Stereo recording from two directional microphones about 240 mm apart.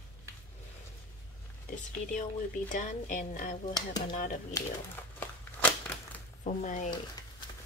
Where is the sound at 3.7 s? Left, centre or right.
Centre.